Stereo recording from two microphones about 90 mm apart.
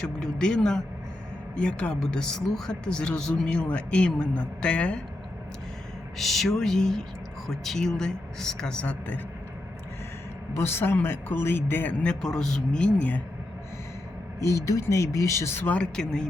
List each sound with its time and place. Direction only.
0.2 s speech: 10° left (ahead or behind)
6.1 s speech: centre (ahead or behind); by 9.2 s 15° left (ahead or behind)
10.5 s a man's voice: 25° left (ahead or behind)
12.2 s speech: 5° left (ahead or behind)
14.3 s speech: 35° left (ahead or behind)
15.7 s speech: 10° left (ahead or behind)